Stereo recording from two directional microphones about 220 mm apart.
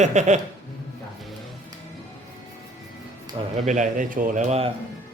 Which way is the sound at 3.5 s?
35° right (ahead or behind).